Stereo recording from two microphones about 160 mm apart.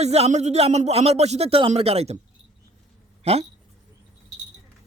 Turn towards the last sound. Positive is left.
turn(degrees=-40)  # may be behind; listen again after turning